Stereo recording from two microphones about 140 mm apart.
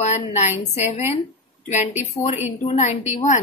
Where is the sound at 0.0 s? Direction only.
55° left (ahead or behind).